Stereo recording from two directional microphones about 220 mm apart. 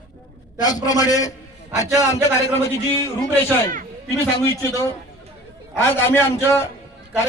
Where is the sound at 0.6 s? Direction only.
15° left (ahead or behind).